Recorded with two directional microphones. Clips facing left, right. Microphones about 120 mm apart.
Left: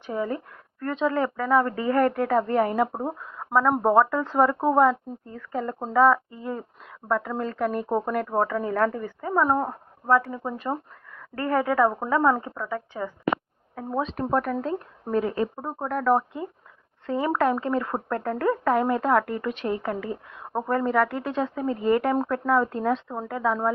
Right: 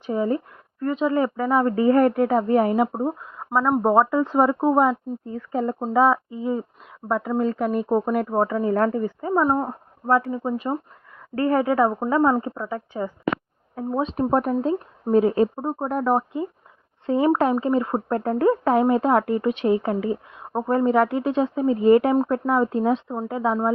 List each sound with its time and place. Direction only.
0.1 s speech: 25° right (ahead or behind)
0.8 s speech: 10° right (ahead or behind)
2.8 s speech: 5° right (ahead or behind); by 9.6 s 20° right (ahead or behind)
10.3 s speech: 10° right (ahead or behind)
11.3 s speech: 25° right (ahead or behind)